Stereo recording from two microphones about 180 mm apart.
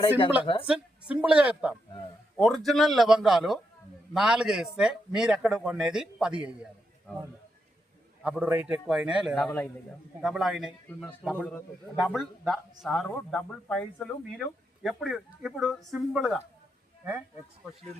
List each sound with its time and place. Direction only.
0.4 s a woman's voice: 30° left (ahead or behind)
0.7 s speech: 5° right (ahead or behind)
8.2 s speech: 10° right (ahead or behind)
9.4 s speech: 5° left (ahead or behind)